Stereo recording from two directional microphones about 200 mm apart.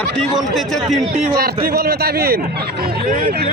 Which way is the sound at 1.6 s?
50° right (ahead or behind).